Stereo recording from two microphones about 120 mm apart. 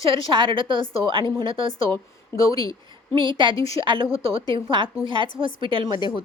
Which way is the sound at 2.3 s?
30° left (ahead or behind).